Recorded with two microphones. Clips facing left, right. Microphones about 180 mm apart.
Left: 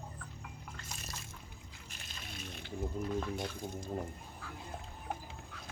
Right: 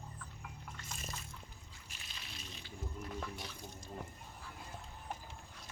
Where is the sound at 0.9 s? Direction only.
80° left.